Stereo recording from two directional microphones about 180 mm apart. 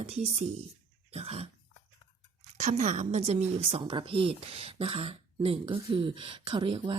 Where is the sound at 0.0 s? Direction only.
35° right (ahead or behind).